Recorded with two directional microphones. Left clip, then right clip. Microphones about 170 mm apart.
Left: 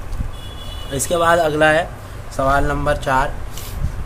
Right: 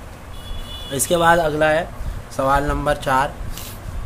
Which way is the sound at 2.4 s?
20° right (ahead or behind).